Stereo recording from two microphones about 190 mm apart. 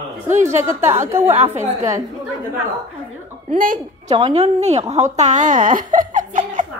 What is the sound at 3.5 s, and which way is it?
Speech, 45° right (ahead or behind).